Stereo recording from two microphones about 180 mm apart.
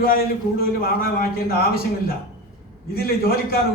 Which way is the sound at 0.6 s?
55° left (ahead or behind).